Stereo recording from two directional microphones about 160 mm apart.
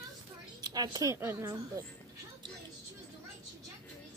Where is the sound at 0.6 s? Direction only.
25° right (ahead or behind).